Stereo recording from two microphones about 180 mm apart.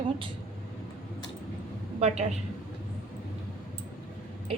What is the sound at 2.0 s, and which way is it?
Speech, 35° right (ahead or behind).